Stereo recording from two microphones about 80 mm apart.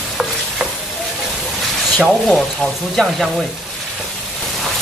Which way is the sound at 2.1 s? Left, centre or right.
Centre.